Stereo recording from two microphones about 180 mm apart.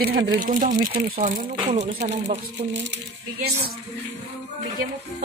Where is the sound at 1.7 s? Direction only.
35° right (ahead or behind).